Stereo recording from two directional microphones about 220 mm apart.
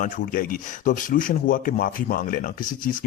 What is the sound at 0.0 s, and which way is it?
Speech, 40° left (ahead or behind).